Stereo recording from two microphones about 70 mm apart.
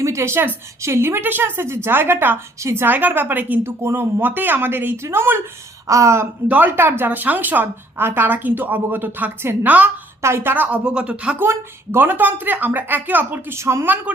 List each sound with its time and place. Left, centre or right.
0.0 s a woman's voice: right
2.6 s a woman's voice: right
2.8 s a woman's voice: right
6.5 s a woman's voice: right
10.2 s a woman's voice: right
10.5 s a woman's voice: right
10.8 s speech: centre
11.3 s a woman's voice: right
13.5 s a woman's voice: right
13.8 s a woman's voice: right